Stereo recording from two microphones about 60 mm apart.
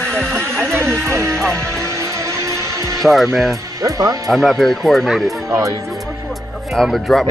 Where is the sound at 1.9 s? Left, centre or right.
Right.